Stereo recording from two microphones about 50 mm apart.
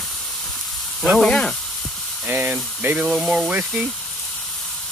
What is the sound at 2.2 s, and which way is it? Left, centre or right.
Speech, right.